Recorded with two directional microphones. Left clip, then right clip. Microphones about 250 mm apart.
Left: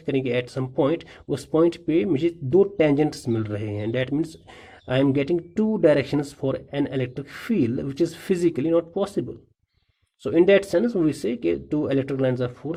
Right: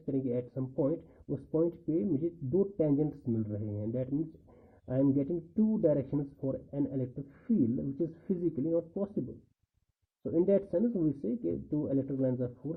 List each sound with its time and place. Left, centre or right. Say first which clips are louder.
0.0 s speech: left 10 dB; centre
10.2 s speech: left 11 dB; centre